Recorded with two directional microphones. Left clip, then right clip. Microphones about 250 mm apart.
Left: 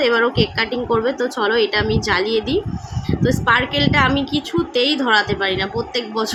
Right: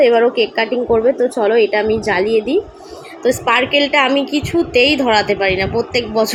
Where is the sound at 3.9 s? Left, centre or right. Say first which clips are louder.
Right 3 dB; centre.